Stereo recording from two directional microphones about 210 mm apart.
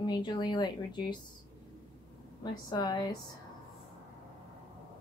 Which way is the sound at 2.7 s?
20° left (ahead or behind).